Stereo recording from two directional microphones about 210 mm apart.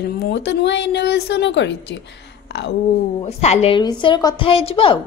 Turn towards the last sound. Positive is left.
turn(degrees=25)  # may be behind; listen again after turning